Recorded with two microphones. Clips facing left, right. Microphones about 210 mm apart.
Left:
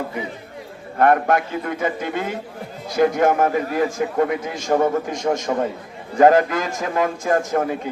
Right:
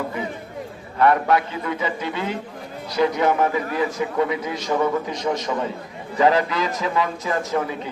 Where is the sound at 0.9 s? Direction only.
50° left (ahead or behind).